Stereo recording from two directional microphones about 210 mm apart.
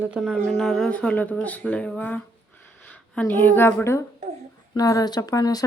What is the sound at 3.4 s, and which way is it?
Speech, 10° left (ahead or behind).